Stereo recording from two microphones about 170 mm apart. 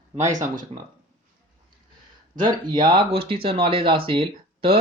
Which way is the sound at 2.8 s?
30° right (ahead or behind).